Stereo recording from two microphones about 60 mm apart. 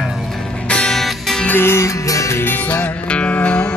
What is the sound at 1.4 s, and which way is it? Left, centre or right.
Music, left.